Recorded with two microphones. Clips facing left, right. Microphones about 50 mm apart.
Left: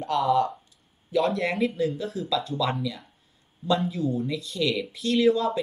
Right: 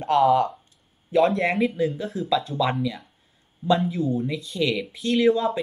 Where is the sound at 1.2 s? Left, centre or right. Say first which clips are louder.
Right 5 dB; centre.